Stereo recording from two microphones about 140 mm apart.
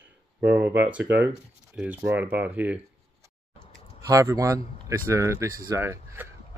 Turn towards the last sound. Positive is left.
turn(degrees=-20)  # may be behind; listen again after turning